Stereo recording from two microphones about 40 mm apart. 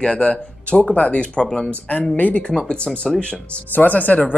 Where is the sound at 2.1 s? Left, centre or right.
Left.